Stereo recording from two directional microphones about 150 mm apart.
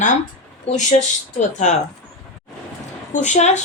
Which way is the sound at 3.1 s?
50° left (ahead or behind).